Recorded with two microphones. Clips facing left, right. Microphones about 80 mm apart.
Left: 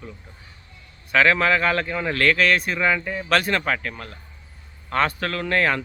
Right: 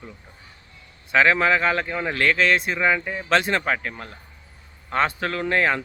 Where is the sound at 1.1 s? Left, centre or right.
Centre.